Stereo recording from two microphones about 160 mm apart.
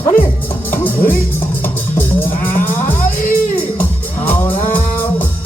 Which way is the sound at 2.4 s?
10° left (ahead or behind).